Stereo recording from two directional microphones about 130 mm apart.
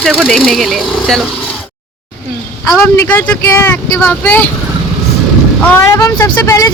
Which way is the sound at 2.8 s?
15° left (ahead or behind).